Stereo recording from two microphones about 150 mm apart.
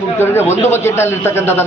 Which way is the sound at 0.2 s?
15° left (ahead or behind).